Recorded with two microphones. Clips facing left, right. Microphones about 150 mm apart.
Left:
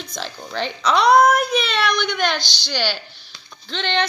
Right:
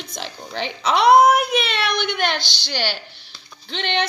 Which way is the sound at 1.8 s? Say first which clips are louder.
Left 1 dB; 60° right (ahead or behind).